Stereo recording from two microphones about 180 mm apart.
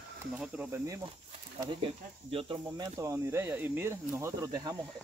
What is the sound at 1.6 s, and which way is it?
Speech, 25° right (ahead or behind).